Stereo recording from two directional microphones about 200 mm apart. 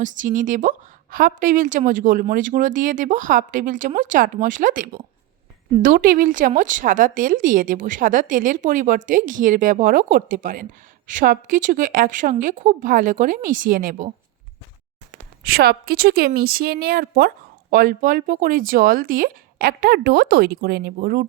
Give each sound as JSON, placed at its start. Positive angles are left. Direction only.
{"t": 0.0, "sound": "a woman's voice", "side_deg": -40}
{"t": 15.4, "sound": "a woman's voice", "side_deg": -50}